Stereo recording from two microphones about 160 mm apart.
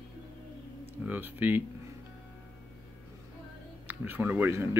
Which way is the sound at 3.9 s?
10° right (ahead or behind).